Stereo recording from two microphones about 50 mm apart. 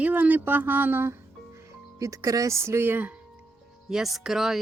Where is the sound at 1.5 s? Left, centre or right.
Right.